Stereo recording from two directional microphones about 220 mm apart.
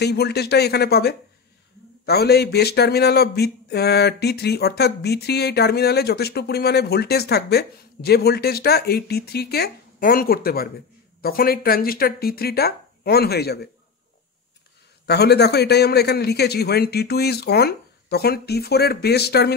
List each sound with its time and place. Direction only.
0.0 s speech: 50° left (ahead or behind)
15.0 s speech: 50° left (ahead or behind)